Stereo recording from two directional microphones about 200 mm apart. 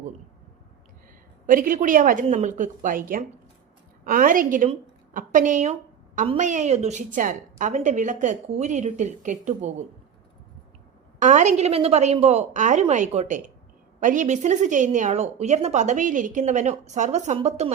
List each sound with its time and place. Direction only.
1.5 s a woman's voice: 45° right (ahead or behind)
11.2 s a woman's voice: 35° right (ahead or behind)